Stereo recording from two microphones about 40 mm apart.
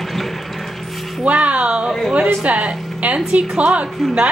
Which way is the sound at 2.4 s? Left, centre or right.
Right.